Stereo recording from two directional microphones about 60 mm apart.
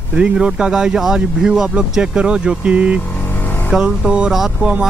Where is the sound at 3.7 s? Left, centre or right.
Centre.